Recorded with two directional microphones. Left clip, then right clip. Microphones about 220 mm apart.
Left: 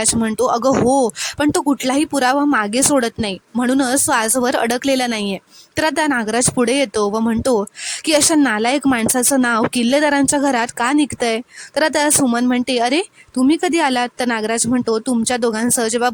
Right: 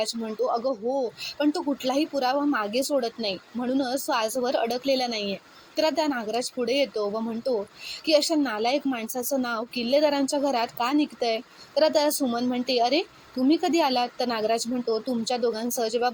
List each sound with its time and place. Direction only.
0.0 s speech: 50° left (ahead or behind)